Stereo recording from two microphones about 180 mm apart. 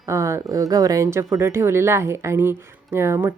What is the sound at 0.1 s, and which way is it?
Speech, 15° right (ahead or behind).